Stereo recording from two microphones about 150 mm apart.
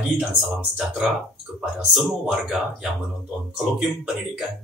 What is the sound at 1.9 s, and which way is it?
Speech, centre (ahead or behind).